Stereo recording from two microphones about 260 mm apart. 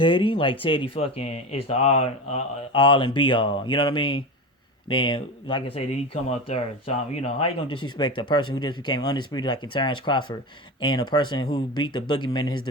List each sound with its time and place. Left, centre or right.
0.0 s speech: centre